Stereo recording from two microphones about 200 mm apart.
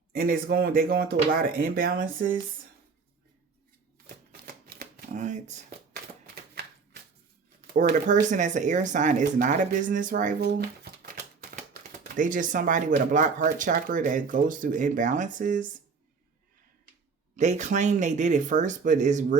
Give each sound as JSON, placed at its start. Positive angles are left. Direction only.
{"t": 0.2, "sound": "speech", "side_deg": -50}
{"t": 4.4, "sound": "shuffling cards", "side_deg": -45}
{"t": 6.2, "sound": "shuffling cards", "side_deg": -50}
{"t": 7.9, "sound": "speech", "side_deg": -40}
{"t": 17.3, "sound": "speech", "side_deg": -35}